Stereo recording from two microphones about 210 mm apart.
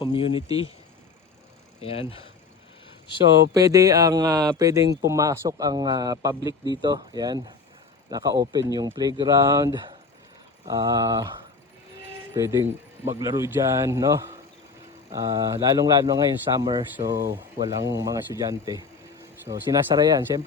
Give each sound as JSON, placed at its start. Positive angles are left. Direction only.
{"t": 0.0, "sound": "speech", "side_deg": 25}
{"t": 1.8, "sound": "speech", "side_deg": 30}
{"t": 3.5, "sound": "speech", "side_deg": -15}
{"t": 12.3, "sound": "speech", "side_deg": -15}